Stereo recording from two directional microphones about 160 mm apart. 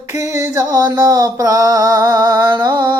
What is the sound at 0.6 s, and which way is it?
Music, 20° right (ahead or behind).